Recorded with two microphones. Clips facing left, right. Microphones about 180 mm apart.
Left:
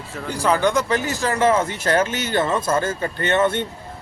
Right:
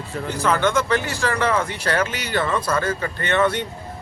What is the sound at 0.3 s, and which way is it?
Speech, 15° left (ahead or behind).